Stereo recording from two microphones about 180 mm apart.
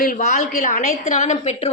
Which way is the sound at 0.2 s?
45° left (ahead or behind).